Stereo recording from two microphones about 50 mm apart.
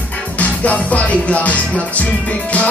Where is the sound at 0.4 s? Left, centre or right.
Left.